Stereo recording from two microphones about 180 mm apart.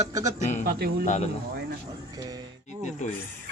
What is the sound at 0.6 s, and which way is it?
Speech, 60° right (ahead or behind).